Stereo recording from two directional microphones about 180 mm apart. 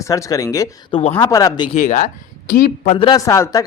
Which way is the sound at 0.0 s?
20° left (ahead or behind).